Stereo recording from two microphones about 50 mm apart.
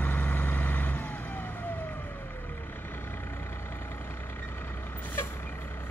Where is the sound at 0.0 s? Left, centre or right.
Left.